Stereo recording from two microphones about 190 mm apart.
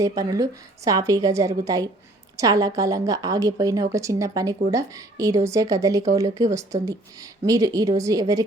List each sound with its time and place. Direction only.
0.2 s a woman's voice: 15° right (ahead or behind)